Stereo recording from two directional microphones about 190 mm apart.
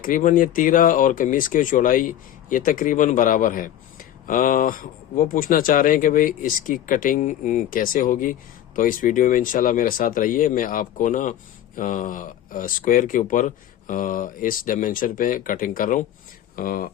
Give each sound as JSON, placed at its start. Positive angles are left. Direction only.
{"t": 0.0, "sound": "speech", "side_deg": 45}